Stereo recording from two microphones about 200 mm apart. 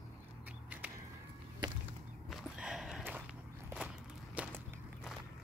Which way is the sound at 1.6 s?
20° right (ahead or behind).